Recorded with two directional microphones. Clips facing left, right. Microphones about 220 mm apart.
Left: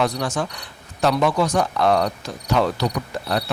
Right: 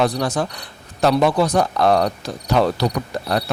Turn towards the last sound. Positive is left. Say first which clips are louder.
# right 2 dB
turn(degrees=-45)  # may be behind; listen again after turning